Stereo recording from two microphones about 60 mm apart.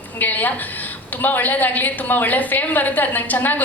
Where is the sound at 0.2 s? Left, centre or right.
Left.